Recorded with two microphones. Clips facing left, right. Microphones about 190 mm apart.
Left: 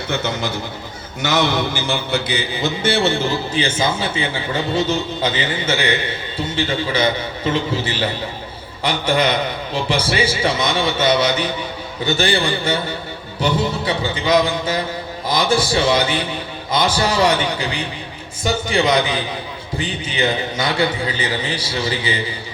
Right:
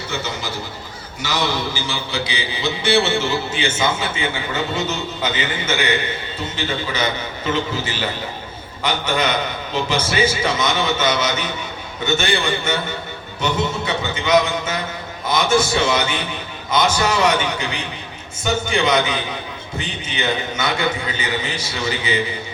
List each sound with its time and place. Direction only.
0.1 s speech: 55° left (ahead or behind)
1.2 s mantra: 55° left (ahead or behind); by 22.1 s 30° left (ahead or behind)